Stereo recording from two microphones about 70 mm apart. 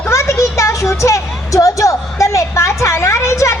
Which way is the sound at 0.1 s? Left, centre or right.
Left.